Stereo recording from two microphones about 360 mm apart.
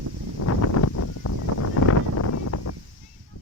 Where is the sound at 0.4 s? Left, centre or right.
Left.